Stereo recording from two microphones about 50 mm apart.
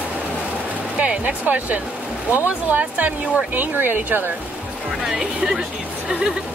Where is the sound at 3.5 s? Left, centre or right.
Right.